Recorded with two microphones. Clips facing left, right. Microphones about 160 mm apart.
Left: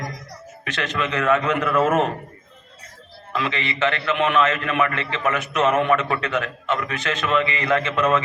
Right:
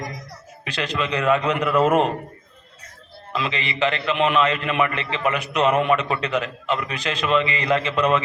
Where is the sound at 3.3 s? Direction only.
20° right (ahead or behind).